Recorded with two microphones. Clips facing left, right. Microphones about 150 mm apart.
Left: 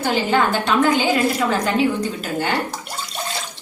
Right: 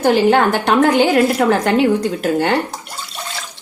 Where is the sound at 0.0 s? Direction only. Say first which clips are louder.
Right 6 dB; 60° right (ahead or behind).